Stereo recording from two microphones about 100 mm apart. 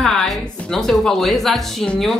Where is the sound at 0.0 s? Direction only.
5° left (ahead or behind).